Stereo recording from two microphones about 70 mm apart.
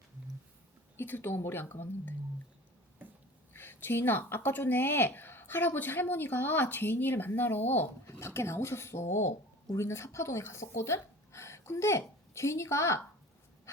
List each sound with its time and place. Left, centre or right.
0.9 s filing: left
3.5 s a woman's voice: left
8.0 s filing: left
9.7 s speech: left